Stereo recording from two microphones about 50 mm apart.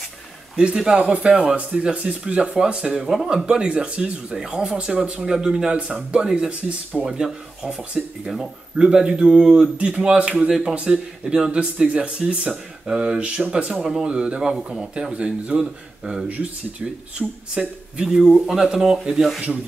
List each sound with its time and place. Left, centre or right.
0.6 s speech: centre
3.4 s speech: right
17.2 s speech: right
17.6 s speech: centre